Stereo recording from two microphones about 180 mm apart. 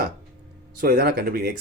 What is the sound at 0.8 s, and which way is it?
Speech, 60° right (ahead or behind).